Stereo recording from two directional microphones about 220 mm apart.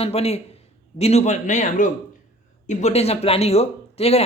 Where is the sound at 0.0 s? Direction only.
25° left (ahead or behind).